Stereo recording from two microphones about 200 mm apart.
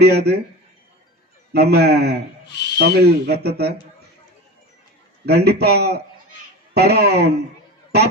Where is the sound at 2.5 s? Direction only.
60° left (ahead or behind).